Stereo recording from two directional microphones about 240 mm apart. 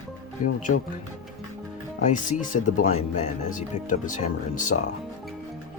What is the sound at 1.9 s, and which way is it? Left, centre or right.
Speech, left.